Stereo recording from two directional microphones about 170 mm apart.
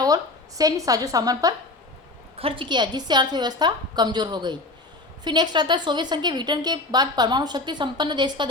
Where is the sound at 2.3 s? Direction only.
35° right (ahead or behind).